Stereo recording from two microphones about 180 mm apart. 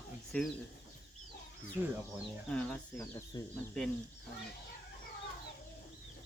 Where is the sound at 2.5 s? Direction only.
5° left (ahead or behind).